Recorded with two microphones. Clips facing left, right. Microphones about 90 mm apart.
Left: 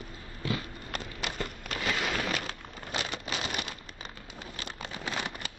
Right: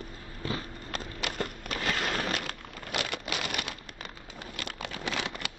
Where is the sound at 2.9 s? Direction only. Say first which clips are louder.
Right 1 dB; 60° right (ahead or behind).